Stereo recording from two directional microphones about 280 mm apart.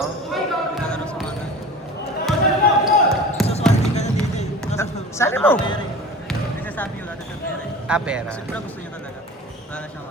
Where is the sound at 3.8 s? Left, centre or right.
Left.